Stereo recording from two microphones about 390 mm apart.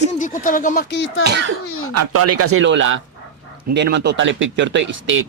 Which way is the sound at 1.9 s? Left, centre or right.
Right.